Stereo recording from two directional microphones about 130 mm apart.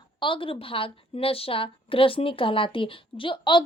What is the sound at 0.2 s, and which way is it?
A woman's voice, 40° left (ahead or behind).